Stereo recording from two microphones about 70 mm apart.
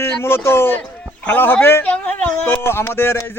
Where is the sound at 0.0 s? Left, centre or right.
Left.